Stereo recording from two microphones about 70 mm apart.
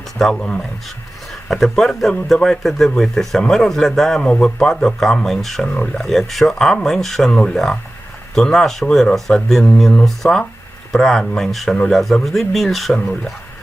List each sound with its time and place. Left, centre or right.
0.2 s a man's voice: centre
5.7 s speech: centre
6.0 s a man's voice: centre